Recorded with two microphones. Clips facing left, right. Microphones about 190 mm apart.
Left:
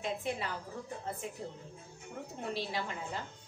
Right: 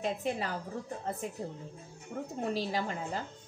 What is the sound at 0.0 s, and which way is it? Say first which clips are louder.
Speech: right 3 dB; 40° right (ahead or behind).